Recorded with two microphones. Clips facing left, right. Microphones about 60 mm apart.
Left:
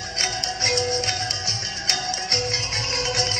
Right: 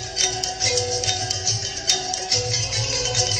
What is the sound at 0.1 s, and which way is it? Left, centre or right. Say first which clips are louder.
Music: even; left.